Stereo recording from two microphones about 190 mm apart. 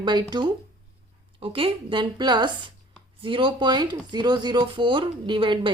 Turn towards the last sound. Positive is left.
turn(degrees=-25)  # may be behind; listen again after turning